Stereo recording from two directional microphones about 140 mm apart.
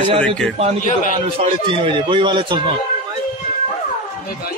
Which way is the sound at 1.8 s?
35° right (ahead or behind).